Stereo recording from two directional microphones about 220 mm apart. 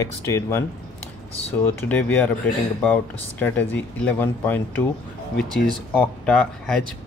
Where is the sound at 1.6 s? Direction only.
5° left (ahead or behind).